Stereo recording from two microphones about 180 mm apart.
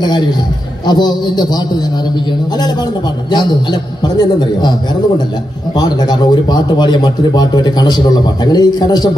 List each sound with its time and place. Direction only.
0.8 s speech: 25° left (ahead or behind)
4.2 s speech: 25° left (ahead or behind)
5.8 s speech: 25° left (ahead or behind)